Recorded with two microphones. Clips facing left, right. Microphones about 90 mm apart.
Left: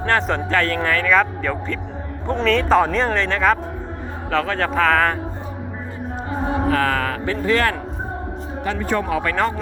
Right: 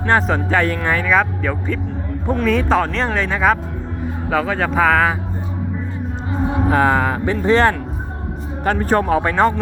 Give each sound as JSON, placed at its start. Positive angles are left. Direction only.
{"t": 0.2, "sound": "speech", "side_deg": -5}
{"t": 0.5, "sound": "speech", "side_deg": -15}
{"t": 6.7, "sound": "speech", "side_deg": -20}
{"t": 8.6, "sound": "speech", "side_deg": -45}
{"t": 9.2, "sound": "speech", "side_deg": -25}